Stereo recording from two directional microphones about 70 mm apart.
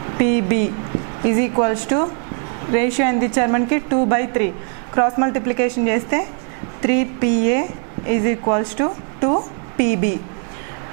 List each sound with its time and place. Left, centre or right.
0.2 s a woman's voice: centre